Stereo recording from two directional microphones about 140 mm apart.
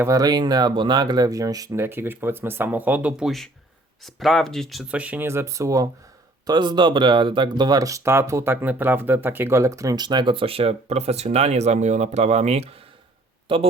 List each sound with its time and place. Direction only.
0.0 s speech: 25° right (ahead or behind)